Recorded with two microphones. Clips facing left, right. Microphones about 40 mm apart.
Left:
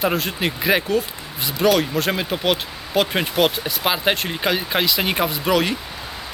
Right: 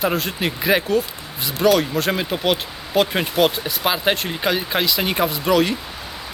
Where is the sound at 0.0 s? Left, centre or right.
Centre.